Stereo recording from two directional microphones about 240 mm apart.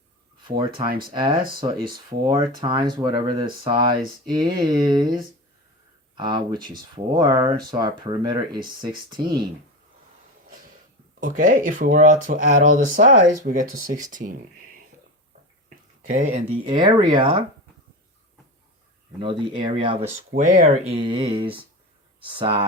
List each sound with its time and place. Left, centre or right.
1.1 s speech: centre
1.4 s speech: right
2.0 s speech: centre
11.2 s speech: right
16.0 s speech: right
19.2 s speech: right